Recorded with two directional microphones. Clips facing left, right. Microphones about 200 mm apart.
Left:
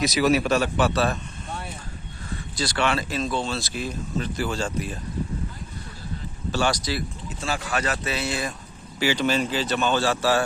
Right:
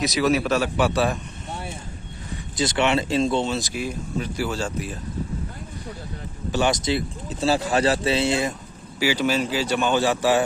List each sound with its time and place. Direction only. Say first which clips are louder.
0.0 s speech: even; centre (ahead or behind)
2.3 s speech: right 4 dB; 20° right (ahead or behind)
6.5 s speech: right 3 dB; 20° right (ahead or behind)
7.3 s speech: right 9 dB; 35° right (ahead or behind)
9.0 s speech: right 1 dB; 10° right (ahead or behind)